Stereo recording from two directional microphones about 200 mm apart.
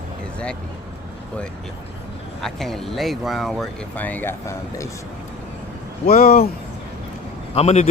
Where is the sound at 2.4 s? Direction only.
Centre (ahead or behind).